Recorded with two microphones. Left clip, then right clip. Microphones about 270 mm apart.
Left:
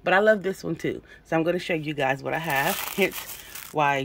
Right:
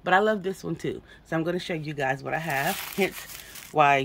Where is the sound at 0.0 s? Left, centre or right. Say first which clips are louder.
Left 3 dB; centre.